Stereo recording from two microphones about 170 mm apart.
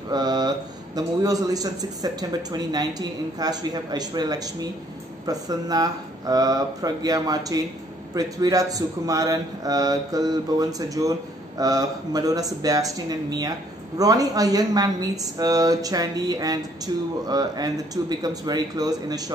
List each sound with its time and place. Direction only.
0.1 s speech: 25° right (ahead or behind)